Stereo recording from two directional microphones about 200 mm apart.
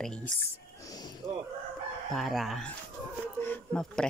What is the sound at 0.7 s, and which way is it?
Music, 20° left (ahead or behind).